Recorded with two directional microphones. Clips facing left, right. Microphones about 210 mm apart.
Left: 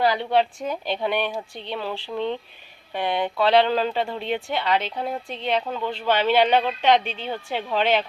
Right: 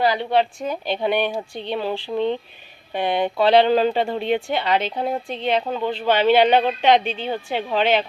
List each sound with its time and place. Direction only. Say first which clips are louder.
0.0 s speech: right 1 dB; 15° right (ahead or behind)
0.3 s a woman's voice: right 1 dB; centre (ahead or behind)
0.9 s speech: right 4 dB; 20° right (ahead or behind)
4.2 s speech: right 5 dB; 10° right (ahead or behind)
4.4 s speech: right 3 dB; 25° right (ahead or behind)